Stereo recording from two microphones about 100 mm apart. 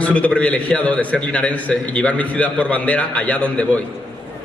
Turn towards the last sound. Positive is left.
turn(degrees=15)  # may be behind; listen again after turning